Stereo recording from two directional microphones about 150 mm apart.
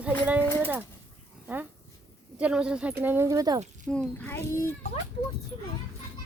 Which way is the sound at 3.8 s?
5° left (ahead or behind).